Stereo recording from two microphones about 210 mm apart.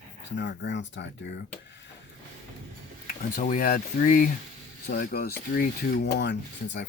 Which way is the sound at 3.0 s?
40° left (ahead or behind).